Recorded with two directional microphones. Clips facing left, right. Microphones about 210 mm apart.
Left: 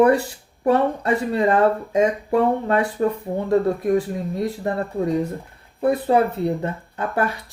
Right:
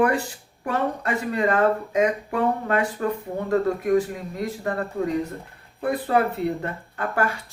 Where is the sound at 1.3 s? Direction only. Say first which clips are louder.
Left 2 dB; 25° left (ahead or behind).